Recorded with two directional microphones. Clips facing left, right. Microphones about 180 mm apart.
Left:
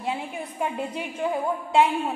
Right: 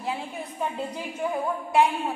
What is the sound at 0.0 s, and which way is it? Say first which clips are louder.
A woman's voice: left 2 dB; 20° left (ahead or behind).